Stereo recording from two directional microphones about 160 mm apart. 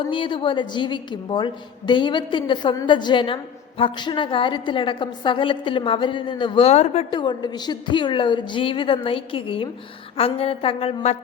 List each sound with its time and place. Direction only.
0.1 s a woman's voice: 30° left (ahead or behind)
7.2 s a woman's voice: 30° left (ahead or behind)